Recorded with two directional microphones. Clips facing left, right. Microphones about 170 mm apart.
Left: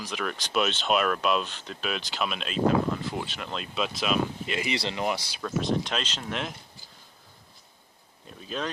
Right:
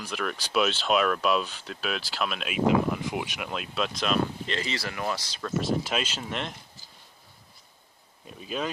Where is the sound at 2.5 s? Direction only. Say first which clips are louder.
Right 1 dB; 15° right (ahead or behind); by 5.5 s 10° left (ahead or behind).